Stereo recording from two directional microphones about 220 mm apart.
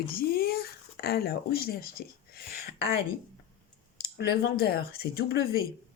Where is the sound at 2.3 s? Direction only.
45° left (ahead or behind).